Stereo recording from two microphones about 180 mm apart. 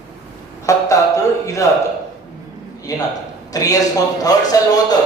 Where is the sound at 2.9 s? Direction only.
20° left (ahead or behind).